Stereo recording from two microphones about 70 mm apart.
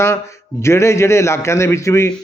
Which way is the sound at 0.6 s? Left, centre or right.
Left.